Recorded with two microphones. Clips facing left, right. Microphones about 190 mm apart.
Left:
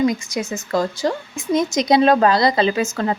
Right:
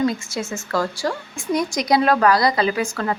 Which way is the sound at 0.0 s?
15° left (ahead or behind).